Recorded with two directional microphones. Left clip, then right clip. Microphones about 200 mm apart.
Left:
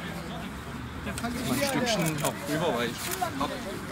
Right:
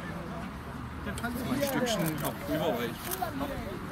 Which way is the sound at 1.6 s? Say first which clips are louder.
Left 2 dB; 30° left (ahead or behind).